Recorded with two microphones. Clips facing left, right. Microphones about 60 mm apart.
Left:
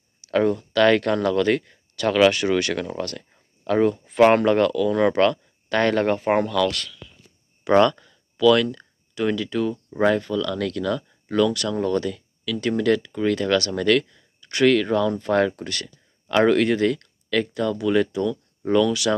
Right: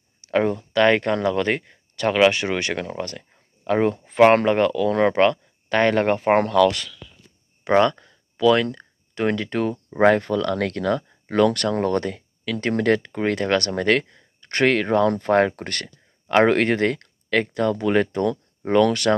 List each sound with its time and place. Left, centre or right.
0.2 s speech: right
6.6 s speech: centre
7.6 s a sound: right
8.7 s speech: right